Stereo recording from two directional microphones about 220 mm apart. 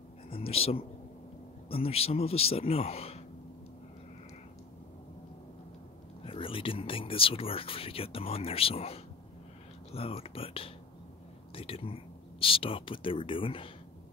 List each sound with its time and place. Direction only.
0.3 s speech: 25° left (ahead or behind)
6.2 s speech: 25° left (ahead or behind)